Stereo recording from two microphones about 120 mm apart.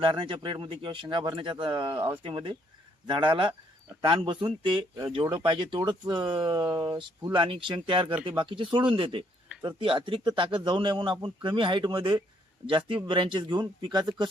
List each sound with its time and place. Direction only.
0.0 s a man's voice: 45° right (ahead or behind)